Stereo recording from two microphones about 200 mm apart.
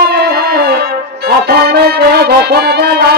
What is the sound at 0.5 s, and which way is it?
Brass instrument, 50° right (ahead or behind).